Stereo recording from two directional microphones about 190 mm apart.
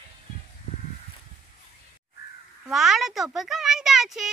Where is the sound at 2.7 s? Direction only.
Centre (ahead or behind).